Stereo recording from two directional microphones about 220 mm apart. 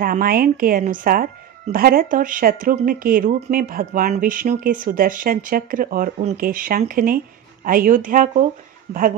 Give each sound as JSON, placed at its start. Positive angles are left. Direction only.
{"t": 0.0, "sound": "speech", "side_deg": -40}